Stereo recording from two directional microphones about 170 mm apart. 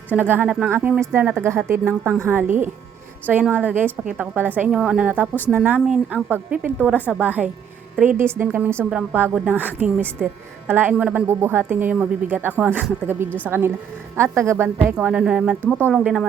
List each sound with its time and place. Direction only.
0.1 s a woman's voice: 10° right (ahead or behind)
3.2 s a woman's voice: 10° right (ahead or behind)